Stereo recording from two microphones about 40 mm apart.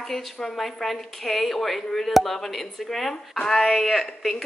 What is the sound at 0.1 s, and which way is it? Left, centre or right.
A woman's voice, centre.